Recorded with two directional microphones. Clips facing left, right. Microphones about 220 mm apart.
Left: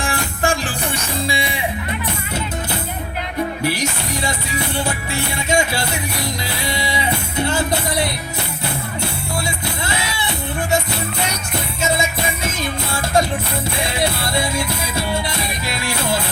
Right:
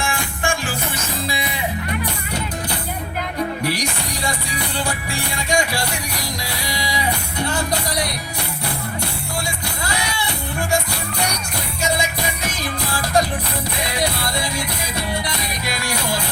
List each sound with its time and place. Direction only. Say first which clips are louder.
0.0 s music: left 3 dB; 40° left (ahead or behind)
3.8 s music: left 3 dB; 25° left (ahead or behind)
9.8 s music: right 3 dB; 25° left (ahead or behind)
12.5 s music: left 2 dB; 25° left (ahead or behind)